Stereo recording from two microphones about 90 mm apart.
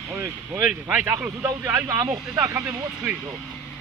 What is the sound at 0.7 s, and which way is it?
Speech, 15° right (ahead or behind).